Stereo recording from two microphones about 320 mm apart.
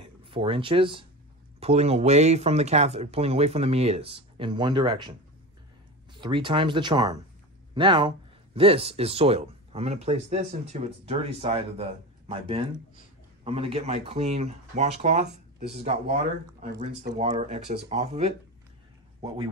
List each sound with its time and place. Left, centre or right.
0.2 s speech: centre
6.1 s speech: centre